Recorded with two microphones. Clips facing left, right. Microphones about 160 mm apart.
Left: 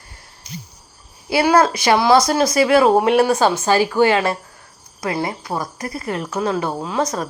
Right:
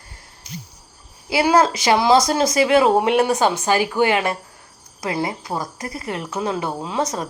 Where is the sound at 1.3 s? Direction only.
20° right (ahead or behind).